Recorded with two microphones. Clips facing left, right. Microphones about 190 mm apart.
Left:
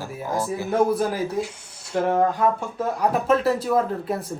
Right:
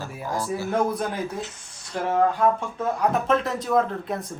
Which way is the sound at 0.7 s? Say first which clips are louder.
Left 5 dB; 5° left (ahead or behind).